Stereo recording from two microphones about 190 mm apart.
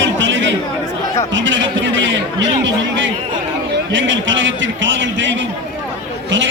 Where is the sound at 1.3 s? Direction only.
80° right.